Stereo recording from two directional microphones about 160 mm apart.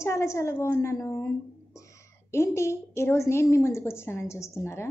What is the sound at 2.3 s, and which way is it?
A woman's voice, 15° left (ahead or behind).